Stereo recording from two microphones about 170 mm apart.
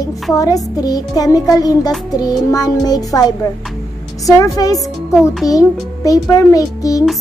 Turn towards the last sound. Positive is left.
turn(degrees=20)  # may be behind; listen again after turning